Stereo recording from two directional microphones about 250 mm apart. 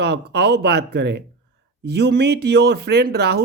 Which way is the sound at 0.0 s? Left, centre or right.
Right.